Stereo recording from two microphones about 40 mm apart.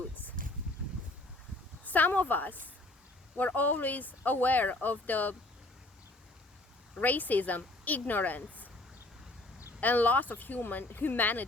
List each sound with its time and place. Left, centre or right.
1.8 s speech: left
7.0 s speech: left
9.8 s speech: left
10.6 s speech: left